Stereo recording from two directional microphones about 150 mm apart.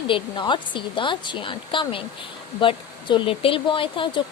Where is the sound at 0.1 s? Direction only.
30° left (ahead or behind).